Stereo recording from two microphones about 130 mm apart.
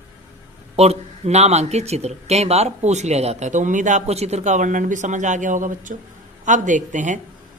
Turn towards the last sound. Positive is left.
turn(degrees=-70)  # may be behind; listen again after turning